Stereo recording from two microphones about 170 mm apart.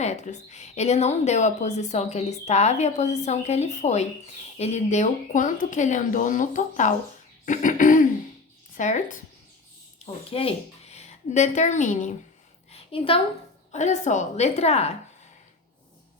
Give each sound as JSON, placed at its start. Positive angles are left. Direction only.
{"t": 0.0, "sound": "a woman's voice", "side_deg": 40}
{"t": 10.2, "sound": "speech", "side_deg": 35}
{"t": 12.7, "sound": "a sound", "side_deg": 35}
{"t": 13.7, "sound": "a woman's voice", "side_deg": 45}